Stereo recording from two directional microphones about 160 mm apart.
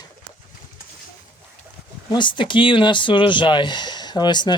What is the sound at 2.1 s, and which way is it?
Speech, 30° left (ahead or behind).